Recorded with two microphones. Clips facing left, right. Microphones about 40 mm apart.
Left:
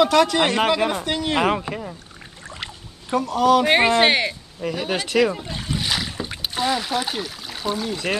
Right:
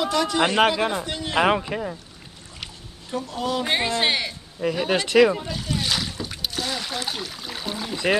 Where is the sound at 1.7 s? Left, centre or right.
Centre.